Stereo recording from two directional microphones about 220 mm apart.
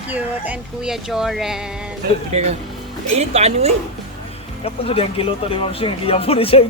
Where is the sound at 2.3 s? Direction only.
30° right (ahead or behind).